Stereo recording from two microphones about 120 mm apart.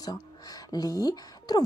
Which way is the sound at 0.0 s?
30° left (ahead or behind).